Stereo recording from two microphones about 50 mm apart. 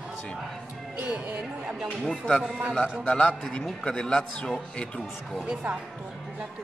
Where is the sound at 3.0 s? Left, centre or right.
Left.